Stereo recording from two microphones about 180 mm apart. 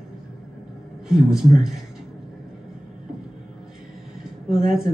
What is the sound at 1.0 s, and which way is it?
Speech, 5° right (ahead or behind).